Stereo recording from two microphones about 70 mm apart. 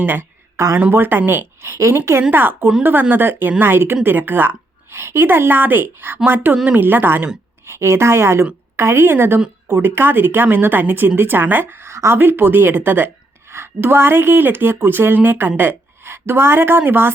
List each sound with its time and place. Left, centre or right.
0.0 s speech: right
0.5 s speech: right
0.8 s a woman's voice: right